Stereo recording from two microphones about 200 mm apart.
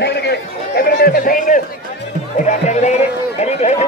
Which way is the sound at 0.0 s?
55° left (ahead or behind).